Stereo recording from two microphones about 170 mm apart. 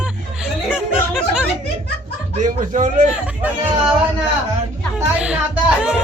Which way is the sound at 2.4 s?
50° right (ahead or behind).